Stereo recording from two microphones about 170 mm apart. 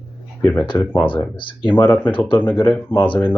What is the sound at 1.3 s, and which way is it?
Speech, 30° left (ahead or behind).